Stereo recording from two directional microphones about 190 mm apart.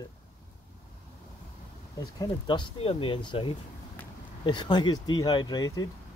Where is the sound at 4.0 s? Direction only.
10° left (ahead or behind).